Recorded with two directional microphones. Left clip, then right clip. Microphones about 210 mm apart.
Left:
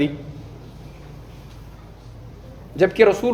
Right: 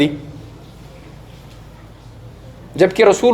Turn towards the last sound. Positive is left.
turn(degrees=-20)  # may be behind; listen again after turning